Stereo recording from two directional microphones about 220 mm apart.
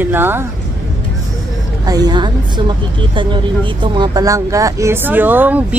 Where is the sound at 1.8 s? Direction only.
15° right (ahead or behind).